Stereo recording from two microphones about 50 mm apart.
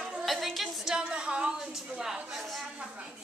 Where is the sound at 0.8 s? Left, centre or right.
Centre.